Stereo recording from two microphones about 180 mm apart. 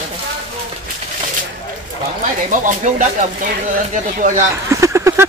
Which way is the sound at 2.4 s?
45° right (ahead or behind).